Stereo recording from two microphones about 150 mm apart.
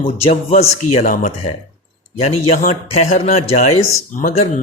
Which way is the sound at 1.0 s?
55° left (ahead or behind).